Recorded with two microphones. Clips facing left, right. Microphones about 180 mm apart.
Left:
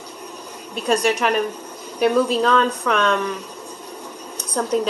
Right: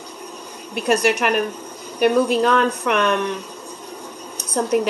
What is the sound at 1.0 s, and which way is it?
Speech, 5° right (ahead or behind).